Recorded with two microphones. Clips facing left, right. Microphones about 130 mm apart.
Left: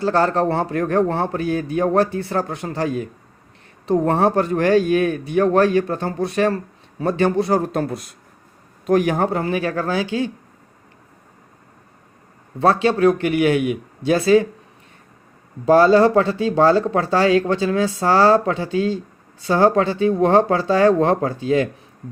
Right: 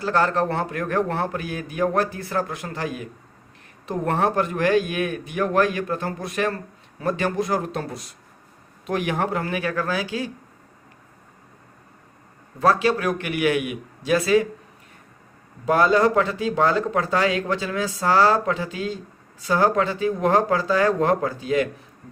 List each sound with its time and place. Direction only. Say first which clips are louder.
0.0 s a man's voice: left 4 dB; 30° left (ahead or behind)
7.7 s speech: left 7 dB; 50° left (ahead or behind)
8.9 s speech: left 7 dB; 40° left (ahead or behind)
12.5 s speech: left 3 dB; 30° left (ahead or behind)
15.6 s speech: left 6 dB; 30° left (ahead or behind)